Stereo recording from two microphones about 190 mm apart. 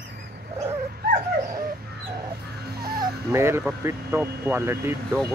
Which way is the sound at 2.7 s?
55° right (ahead or behind).